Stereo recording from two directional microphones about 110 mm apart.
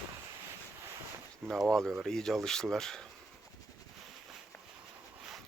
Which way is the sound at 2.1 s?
5° left (ahead or behind).